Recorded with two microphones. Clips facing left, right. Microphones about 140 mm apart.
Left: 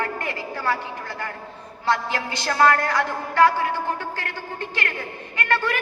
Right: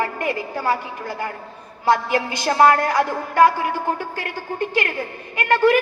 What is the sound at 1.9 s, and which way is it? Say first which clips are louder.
A woman's voice: right 5 dB; 15° right (ahead or behind).